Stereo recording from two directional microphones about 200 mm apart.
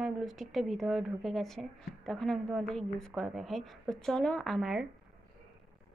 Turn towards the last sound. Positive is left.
turn(degrees=0)  # may be behind; listen again after turning